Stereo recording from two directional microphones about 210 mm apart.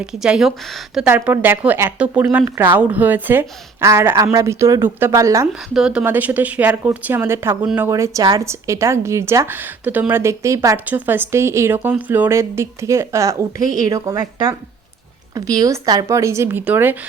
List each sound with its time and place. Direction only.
0.0 s speech: 5° right (ahead or behind)
5.7 s speech: 5° right (ahead or behind)